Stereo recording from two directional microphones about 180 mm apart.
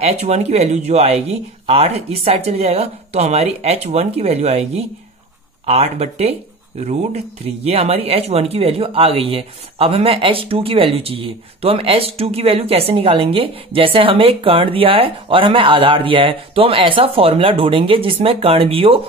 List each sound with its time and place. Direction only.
0.0 s speech: 35° right (ahead or behind)